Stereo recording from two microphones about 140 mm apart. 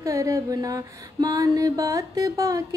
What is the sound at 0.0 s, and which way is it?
Music, 20° right (ahead or behind).